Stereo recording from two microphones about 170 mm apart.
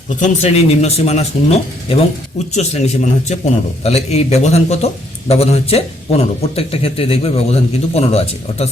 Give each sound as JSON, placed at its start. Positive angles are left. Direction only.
{"t": 0.1, "sound": "a man's voice", "side_deg": 45}